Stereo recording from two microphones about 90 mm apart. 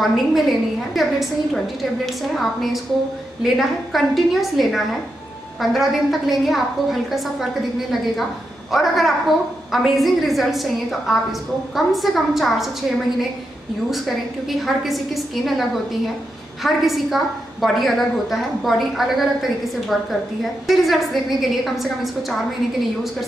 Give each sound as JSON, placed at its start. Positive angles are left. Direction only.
{"t": 0.0, "sound": "a woman's voice", "side_deg": 0}
{"t": 8.7, "sound": "a woman's voice", "side_deg": 0}
{"t": 13.8, "sound": "a woman's voice", "side_deg": 0}